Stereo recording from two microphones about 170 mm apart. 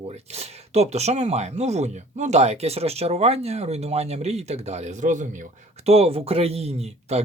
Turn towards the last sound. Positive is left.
turn(degrees=-40)  # may be behind; listen again after turning